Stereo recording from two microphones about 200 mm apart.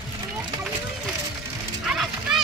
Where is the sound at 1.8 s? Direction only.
Centre (ahead or behind).